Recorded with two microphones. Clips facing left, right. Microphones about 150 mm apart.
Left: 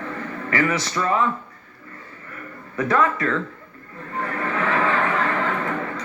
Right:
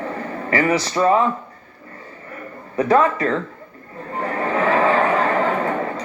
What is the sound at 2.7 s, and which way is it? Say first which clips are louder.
Speech: right 4 dB; 30° right (ahead or behind).